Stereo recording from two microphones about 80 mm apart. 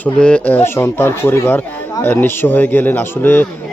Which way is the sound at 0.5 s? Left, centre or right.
Left.